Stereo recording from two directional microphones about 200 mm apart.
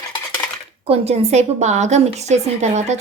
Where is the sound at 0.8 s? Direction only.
30° right (ahead or behind).